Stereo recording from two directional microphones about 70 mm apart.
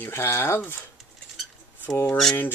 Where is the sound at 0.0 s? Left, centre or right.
Left.